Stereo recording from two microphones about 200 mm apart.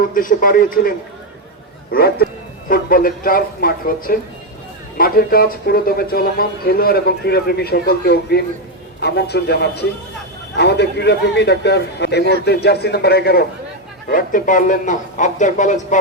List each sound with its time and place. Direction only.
0.0 s a man's voice: 40° left (ahead or behind)